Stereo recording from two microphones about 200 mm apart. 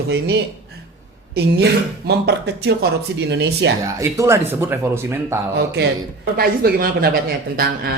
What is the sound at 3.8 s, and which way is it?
A man's voice, 15° right (ahead or behind).